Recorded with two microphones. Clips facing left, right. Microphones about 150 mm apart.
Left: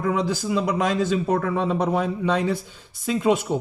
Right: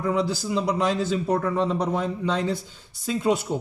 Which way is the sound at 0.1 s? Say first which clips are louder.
Left 1 dB; 90° left.